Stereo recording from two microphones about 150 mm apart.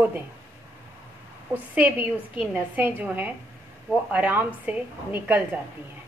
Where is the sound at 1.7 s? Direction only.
15° right (ahead or behind).